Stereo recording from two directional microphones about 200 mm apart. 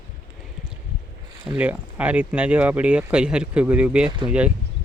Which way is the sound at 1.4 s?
10° right (ahead or behind).